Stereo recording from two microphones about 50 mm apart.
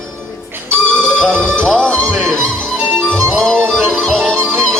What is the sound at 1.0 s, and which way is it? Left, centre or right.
Music, centre.